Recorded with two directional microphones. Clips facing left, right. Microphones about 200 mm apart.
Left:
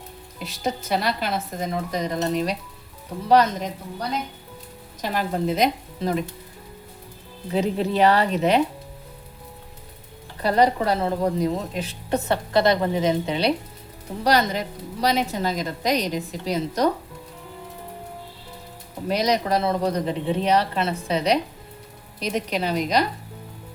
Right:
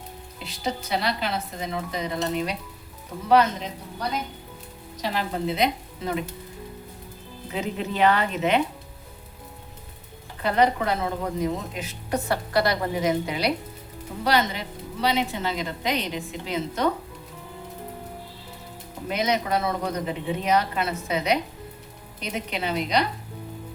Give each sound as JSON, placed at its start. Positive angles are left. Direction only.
{"t": 0.3, "sound": "a woman's voice", "side_deg": 45}
{"t": 5.0, "sound": "a woman's voice", "side_deg": 45}
{"t": 7.5, "sound": "speech", "side_deg": 35}
{"t": 10.4, "sound": "a woman's voice", "side_deg": 35}
{"t": 14.3, "sound": "speech", "side_deg": 40}
{"t": 19.0, "sound": "speech", "side_deg": 35}